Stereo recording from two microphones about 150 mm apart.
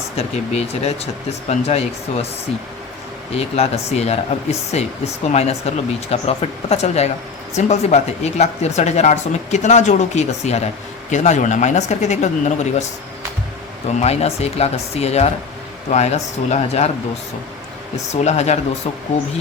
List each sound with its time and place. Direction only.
0.2 s speech: 45° left (ahead or behind)
3.3 s speech: 45° left (ahead or behind)
14.0 s speech: 45° left (ahead or behind)
18.1 s speech: 50° left (ahead or behind)